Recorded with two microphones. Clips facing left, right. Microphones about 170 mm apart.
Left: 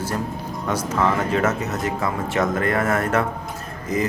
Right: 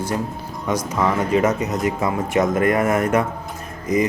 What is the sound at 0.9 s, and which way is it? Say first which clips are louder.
Speech: right 2 dB; 10° right (ahead or behind).